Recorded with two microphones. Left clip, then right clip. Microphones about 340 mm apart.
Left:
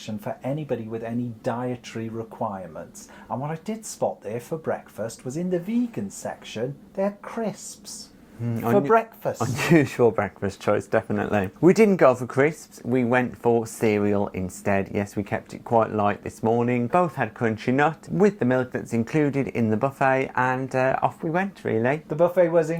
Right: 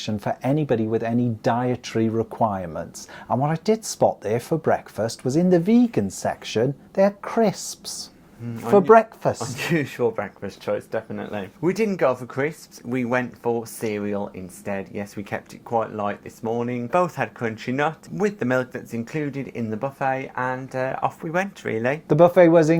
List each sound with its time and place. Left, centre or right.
0.0 s speech: right
8.9 s speech: right
9.4 s speech: left
12.9 s speech: centre
18.9 s speech: left
21.2 s speech: centre
22.1 s speech: right